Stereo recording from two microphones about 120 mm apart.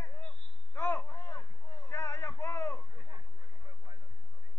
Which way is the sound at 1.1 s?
20° left (ahead or behind).